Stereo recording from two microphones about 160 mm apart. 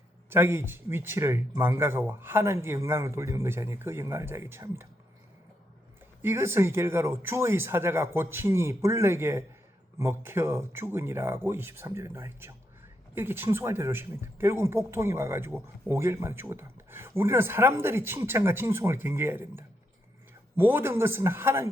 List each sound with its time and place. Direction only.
0.3 s speech: 15° right (ahead or behind)
6.2 s speech: 15° right (ahead or behind)